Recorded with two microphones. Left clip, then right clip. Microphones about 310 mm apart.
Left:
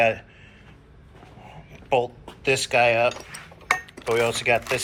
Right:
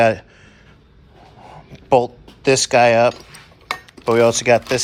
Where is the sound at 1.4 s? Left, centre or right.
Right.